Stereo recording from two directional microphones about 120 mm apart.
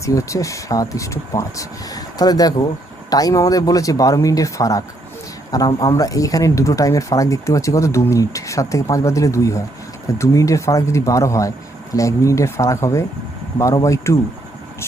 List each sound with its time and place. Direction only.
0.0 s speech: 25° left (ahead or behind)